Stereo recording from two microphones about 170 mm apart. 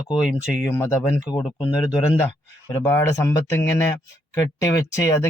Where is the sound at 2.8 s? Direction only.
15° left (ahead or behind).